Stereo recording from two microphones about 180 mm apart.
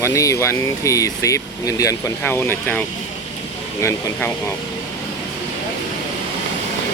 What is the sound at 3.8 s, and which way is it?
Speech, 10° left (ahead or behind).